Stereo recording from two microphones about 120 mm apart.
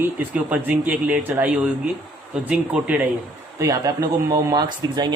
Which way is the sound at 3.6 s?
30° right (ahead or behind).